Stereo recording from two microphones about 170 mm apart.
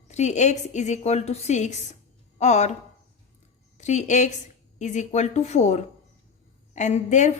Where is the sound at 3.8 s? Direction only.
45° left (ahead or behind).